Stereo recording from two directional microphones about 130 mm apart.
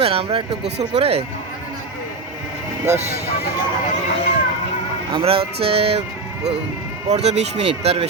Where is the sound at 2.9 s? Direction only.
60° right (ahead or behind).